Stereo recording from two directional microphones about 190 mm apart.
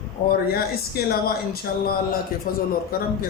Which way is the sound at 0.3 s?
50° left (ahead or behind).